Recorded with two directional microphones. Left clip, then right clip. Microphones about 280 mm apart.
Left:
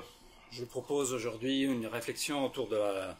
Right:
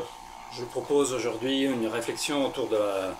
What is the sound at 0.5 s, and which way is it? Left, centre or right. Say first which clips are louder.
Speech: right 9 dB; left.